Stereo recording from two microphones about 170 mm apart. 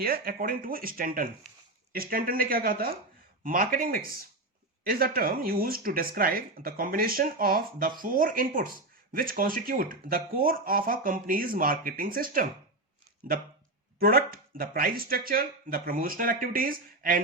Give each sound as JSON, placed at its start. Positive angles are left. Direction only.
{"t": 0.0, "sound": "speech", "side_deg": -60}
{"t": 14.0, "sound": "speech", "side_deg": -60}